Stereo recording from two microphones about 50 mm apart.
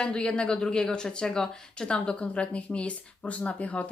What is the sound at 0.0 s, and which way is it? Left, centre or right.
Speech, centre.